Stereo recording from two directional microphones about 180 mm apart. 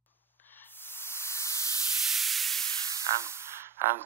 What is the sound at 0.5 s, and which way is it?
Static, 10° left (ahead or behind).